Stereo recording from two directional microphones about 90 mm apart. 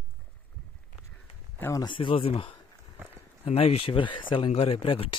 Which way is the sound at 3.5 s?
90° left.